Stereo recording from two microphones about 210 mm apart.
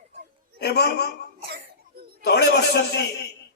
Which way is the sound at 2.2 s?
50° left (ahead or behind).